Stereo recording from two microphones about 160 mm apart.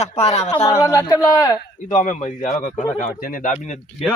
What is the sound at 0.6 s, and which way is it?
Speech, 20° left (ahead or behind).